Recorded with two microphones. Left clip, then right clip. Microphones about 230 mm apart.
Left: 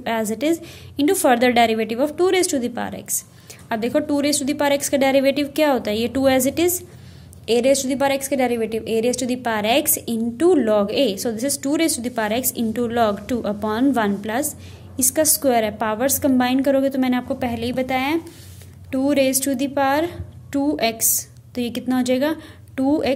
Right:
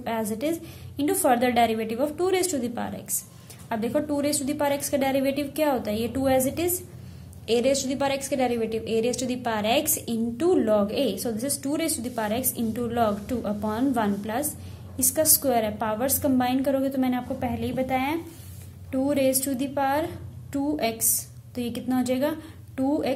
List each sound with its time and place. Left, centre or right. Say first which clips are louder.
0.0 s a woman's voice: left 6 dB; left